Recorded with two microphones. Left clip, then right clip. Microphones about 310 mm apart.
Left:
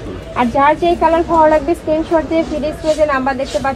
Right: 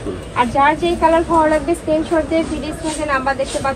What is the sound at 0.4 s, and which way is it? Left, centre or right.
A woman's voice, right.